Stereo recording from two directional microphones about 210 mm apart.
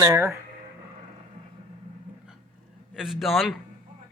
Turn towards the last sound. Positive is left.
turn(degrees=0)  # may be behind; listen again after turning